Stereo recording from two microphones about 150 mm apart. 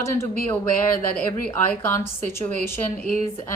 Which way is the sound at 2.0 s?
15° left (ahead or behind).